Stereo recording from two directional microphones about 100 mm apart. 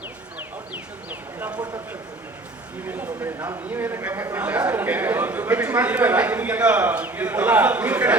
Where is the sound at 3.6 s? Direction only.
20° right (ahead or behind).